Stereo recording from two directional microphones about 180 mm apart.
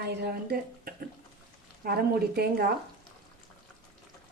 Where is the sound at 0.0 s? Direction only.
65° right (ahead or behind).